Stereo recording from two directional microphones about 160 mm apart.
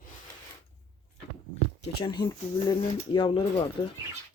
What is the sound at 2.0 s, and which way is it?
Speech, 30° left (ahead or behind).